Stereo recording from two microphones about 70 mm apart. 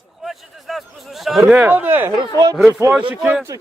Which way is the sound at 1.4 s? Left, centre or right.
Right.